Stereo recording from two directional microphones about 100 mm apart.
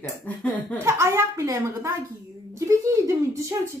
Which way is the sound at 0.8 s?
30° right (ahead or behind).